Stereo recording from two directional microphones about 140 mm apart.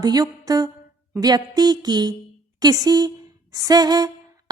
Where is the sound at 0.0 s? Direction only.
30° right (ahead or behind).